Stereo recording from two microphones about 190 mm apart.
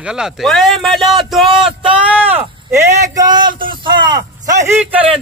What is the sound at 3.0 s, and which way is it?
Speech, 20° right (ahead or behind).